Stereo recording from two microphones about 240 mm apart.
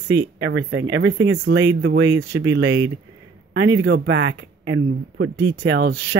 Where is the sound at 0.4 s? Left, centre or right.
Right.